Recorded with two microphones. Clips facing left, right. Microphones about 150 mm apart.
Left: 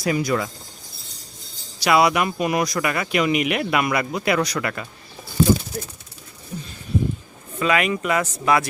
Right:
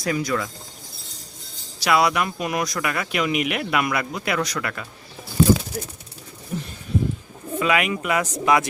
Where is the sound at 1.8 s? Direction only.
Centre (ahead or behind).